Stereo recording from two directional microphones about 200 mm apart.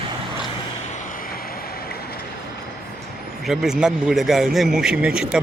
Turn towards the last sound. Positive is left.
turn(degrees=-5)  # may be behind; listen again after turning